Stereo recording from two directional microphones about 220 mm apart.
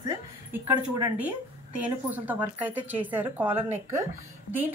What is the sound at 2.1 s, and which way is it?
A woman's voice, 10° right (ahead or behind).